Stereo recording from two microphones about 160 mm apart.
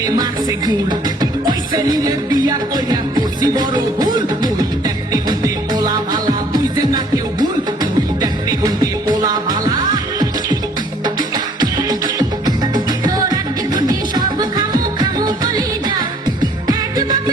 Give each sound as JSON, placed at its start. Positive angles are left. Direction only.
{"t": 0.0, "sound": "music", "side_deg": -25}